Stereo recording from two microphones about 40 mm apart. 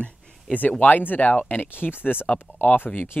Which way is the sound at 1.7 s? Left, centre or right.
Left.